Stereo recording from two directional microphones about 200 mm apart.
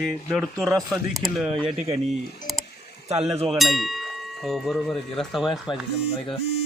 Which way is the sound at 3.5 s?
Centre (ahead or behind).